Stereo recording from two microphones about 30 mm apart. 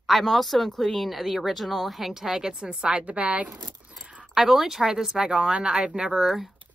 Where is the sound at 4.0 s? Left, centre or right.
Right.